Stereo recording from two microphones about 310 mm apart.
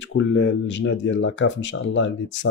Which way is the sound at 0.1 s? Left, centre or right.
Left.